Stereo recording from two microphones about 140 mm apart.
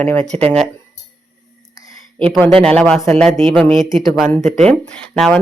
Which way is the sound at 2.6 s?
5° left (ahead or behind).